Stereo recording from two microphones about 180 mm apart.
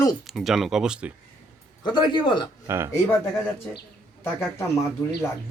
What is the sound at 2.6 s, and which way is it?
Speech, 15° right (ahead or behind).